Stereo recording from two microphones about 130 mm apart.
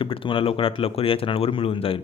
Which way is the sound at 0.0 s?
40° left (ahead or behind).